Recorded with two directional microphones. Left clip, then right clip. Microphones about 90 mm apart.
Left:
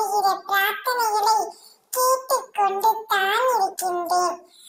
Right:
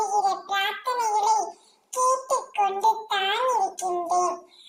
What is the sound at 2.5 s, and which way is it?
Singing, 20° left (ahead or behind).